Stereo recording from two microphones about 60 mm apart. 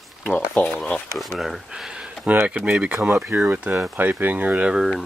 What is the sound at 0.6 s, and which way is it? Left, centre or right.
Speech, left.